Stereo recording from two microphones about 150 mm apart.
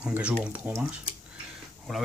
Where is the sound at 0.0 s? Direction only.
10° right (ahead or behind).